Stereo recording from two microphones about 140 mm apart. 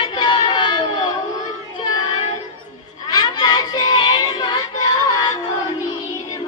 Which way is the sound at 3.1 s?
30° left (ahead or behind).